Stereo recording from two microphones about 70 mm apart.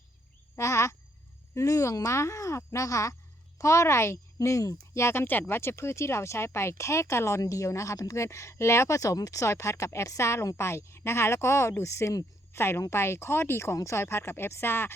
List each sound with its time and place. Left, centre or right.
0.5 s a sound: left
1.5 s speech: left
4.7 s speech: left